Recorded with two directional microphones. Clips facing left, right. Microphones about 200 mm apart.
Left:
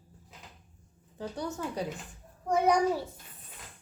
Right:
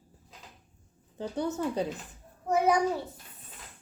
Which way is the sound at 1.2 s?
25° right (ahead or behind).